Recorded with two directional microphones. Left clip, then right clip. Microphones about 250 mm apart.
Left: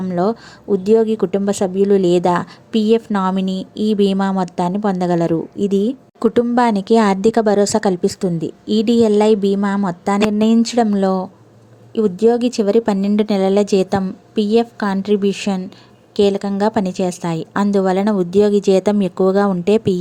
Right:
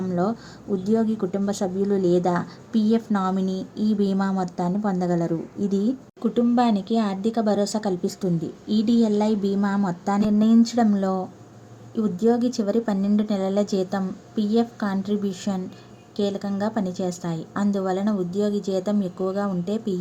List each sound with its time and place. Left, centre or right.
0.1 s a woman's voice: left